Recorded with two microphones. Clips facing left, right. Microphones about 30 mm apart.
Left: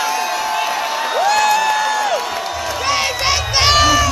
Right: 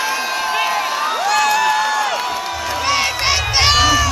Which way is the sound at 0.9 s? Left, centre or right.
Centre.